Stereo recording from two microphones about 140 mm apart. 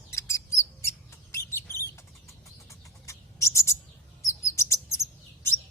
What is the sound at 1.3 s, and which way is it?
Mouse, 20° left (ahead or behind).